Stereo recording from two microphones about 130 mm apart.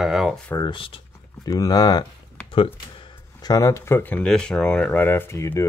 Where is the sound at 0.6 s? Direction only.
40° left (ahead or behind).